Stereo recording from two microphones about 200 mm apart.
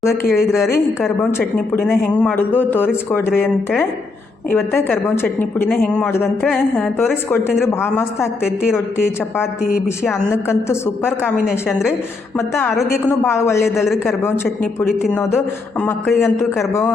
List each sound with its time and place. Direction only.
0.0 s a woman's voice: 15° left (ahead or behind)
0.3 s a woman's voice: centre (ahead or behind)
1.3 s a woman's voice: 10° left (ahead or behind)
4.5 s a woman's voice: 10° left (ahead or behind)
9.4 s a woman's voice: 5° right (ahead or behind)
10.5 s a woman's voice: 15° left (ahead or behind)
12.4 s a woman's voice: 10° left (ahead or behind)
12.7 s a woman's voice: centre (ahead or behind)
13.2 s a woman's voice: 15° left (ahead or behind)